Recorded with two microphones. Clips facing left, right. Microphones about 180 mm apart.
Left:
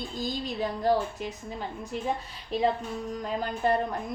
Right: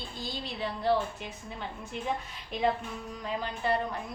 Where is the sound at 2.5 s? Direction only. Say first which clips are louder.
Left 4 dB; 35° left (ahead or behind).